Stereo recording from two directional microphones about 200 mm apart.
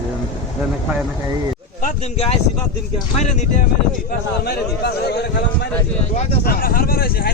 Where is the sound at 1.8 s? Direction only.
40° left (ahead or behind).